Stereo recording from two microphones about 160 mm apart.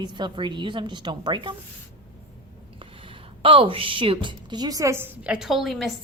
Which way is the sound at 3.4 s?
35° right (ahead or behind).